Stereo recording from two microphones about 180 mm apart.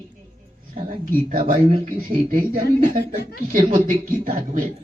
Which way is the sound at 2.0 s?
50° right (ahead or behind).